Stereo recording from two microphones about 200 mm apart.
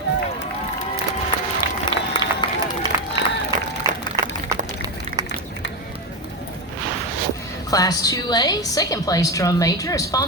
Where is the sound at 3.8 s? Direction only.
15° right (ahead or behind).